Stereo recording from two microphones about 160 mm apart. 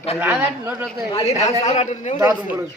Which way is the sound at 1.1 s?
40° left (ahead or behind).